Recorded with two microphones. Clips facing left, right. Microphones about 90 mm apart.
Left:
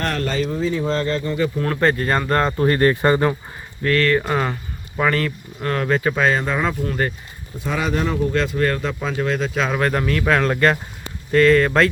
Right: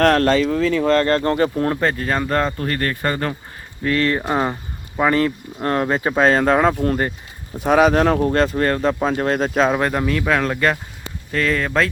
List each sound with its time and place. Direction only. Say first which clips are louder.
0.0 s speech: right 8 dB; 75° right (ahead or behind)
1.8 s speech: left 2 dB; centre (ahead or behind)
2.5 s speech: left 6 dB; 15° left (ahead or behind)
3.8 s speech: left 1 dB; 20° right (ahead or behind); by 6.4 s 35° right (ahead or behind)
6.4 s speech: right 6 dB; 50° right (ahead or behind)
7.6 s speech: right 8 dB; 65° right (ahead or behind); by 9.2 s 30° right (ahead or behind)
9.2 s speech: right 2 dB; 40° right (ahead or behind)
9.6 s speech: right 2 dB; 15° right (ahead or behind); by 11.9 s centre (ahead or behind)